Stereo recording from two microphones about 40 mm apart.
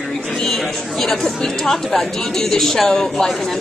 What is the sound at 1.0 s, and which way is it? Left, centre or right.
A woman's voice, centre.